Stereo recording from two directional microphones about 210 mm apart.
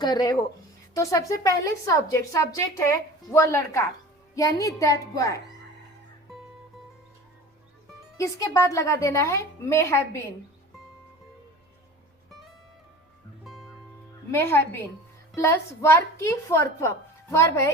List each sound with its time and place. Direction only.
0.0 s a woman's voice: 20° left (ahead or behind)
8.2 s a woman's voice: 15° left (ahead or behind)
13.4 s music: centre (ahead or behind)
14.3 s a woman's voice: 10° left (ahead or behind)